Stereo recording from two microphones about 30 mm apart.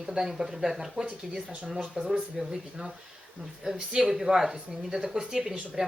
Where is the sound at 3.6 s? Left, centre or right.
Centre.